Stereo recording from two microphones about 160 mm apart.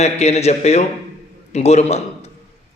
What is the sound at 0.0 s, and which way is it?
A man's voice, 40° left (ahead or behind).